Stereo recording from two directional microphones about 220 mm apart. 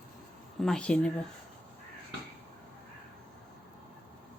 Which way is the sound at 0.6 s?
5° left (ahead or behind).